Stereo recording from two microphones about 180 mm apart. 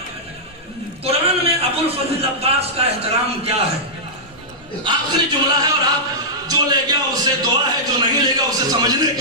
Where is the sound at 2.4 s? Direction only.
35° right (ahead or behind).